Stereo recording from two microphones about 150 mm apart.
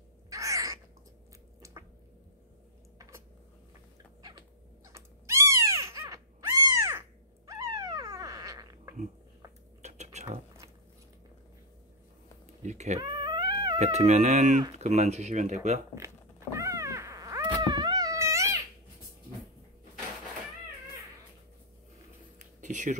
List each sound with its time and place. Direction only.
0.3 s crow: 20° right (ahead or behind)
1.6 s squish: 20° right (ahead or behind)
4.2 s cat: 25° right (ahead or behind)
9.8 s a sound: 50° right (ahead or behind)
12.6 s speech: 50° right (ahead or behind)
13.0 s cat: 30° right (ahead or behind)
13.7 s speech: 50° right (ahead or behind)
15.9 s cat: 20° right (ahead or behind)
22.4 s a sound: 55° right (ahead or behind)